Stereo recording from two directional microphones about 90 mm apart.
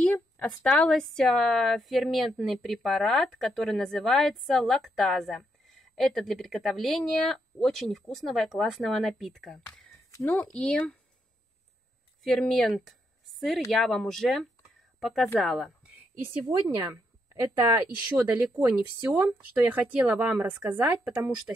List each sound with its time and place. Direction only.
0.0 s a sound: 15° left (ahead or behind)
0.7 s a woman's voice: 10° left (ahead or behind)
10.2 s speech: 20° left (ahead or behind)
12.2 s a woman's voice: 5° left (ahead or behind)
16.2 s speech: 25° right (ahead or behind)
18.3 s speech: 20° right (ahead or behind)